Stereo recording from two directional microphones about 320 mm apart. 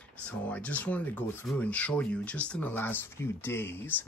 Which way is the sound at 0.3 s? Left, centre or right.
Centre.